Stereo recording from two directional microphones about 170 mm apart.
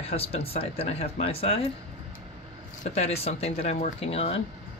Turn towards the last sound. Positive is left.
turn(degrees=35)  # may be behind; listen again after turning